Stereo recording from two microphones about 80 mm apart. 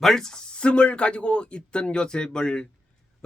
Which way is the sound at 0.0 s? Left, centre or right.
Centre.